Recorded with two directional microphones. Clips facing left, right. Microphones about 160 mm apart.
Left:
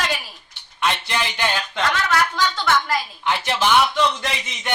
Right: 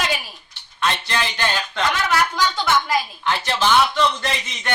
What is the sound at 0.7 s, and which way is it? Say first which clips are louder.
Speech: even; 15° left (ahead or behind).